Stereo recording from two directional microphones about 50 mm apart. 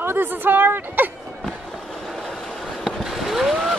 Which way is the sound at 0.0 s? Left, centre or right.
Right.